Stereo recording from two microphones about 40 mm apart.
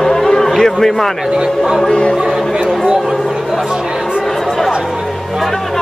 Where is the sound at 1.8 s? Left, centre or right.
Left.